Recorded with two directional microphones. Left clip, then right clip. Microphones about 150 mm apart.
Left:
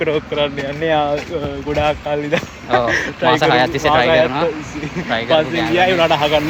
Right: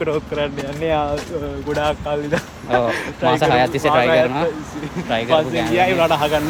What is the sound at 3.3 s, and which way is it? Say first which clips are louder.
Speech: left 2 dB; 30° right (ahead or behind).